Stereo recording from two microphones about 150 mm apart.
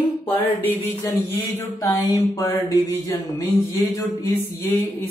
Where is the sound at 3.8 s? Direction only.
15° left (ahead or behind).